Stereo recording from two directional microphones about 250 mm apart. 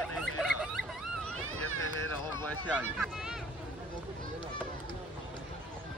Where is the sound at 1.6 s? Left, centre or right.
Right.